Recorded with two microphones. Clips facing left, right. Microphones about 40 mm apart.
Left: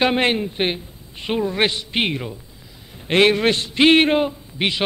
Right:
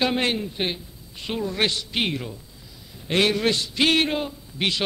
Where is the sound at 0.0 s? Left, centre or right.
Left.